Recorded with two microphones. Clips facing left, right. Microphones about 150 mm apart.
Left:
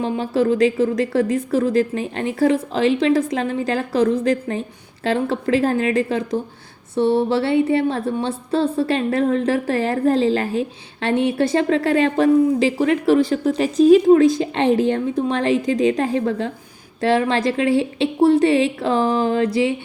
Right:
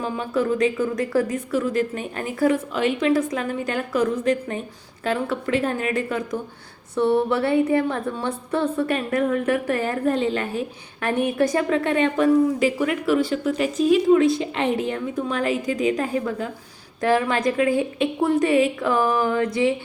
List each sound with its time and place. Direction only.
0.0 s a woman's voice: 30° left (ahead or behind)